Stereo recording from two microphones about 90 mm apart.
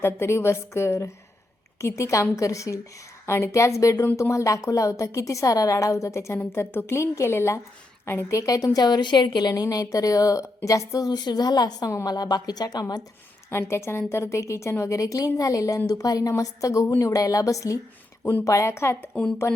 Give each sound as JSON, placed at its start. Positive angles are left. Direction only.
{"t": 0.0, "sound": "a woman's voice", "side_deg": 30}
{"t": 13.5, "sound": "a woman's voice", "side_deg": 30}